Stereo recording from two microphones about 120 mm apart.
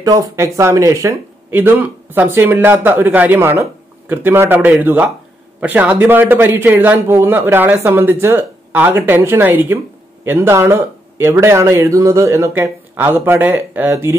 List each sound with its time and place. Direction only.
0.0 s a man's voice: 30° right (ahead or behind)